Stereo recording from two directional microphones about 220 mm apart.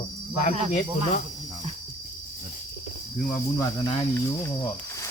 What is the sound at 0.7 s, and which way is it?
Cricket, 40° left (ahead or behind).